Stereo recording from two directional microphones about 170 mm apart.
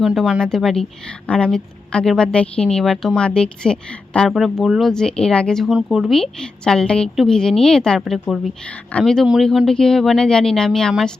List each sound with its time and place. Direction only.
0.0 s a woman's voice: centre (ahead or behind)